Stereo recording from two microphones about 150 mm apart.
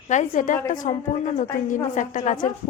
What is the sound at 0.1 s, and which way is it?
A woman's voice, 55° left (ahead or behind).